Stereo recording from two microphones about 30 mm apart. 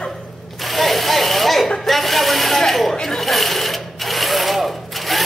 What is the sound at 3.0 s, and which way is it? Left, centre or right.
Sewing machine, centre.